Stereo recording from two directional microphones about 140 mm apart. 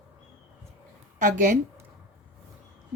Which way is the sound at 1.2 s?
65° right (ahead or behind).